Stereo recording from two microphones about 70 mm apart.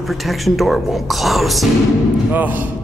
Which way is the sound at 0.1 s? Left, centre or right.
Centre.